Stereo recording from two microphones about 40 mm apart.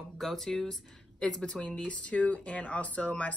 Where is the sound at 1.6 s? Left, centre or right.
Left.